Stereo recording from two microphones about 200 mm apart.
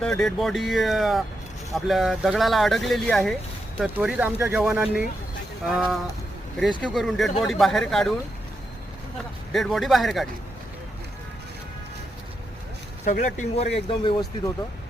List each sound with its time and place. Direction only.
0.0 s speech: 5° left (ahead or behind)
3.8 s speech: 10° right (ahead or behind)
9.5 s speech: centre (ahead or behind)
13.1 s speech: 35° left (ahead or behind)
13.7 s speech: 25° left (ahead or behind)